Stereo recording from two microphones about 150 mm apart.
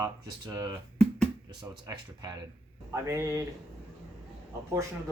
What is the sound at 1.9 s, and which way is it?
Speech, 25° right (ahead or behind).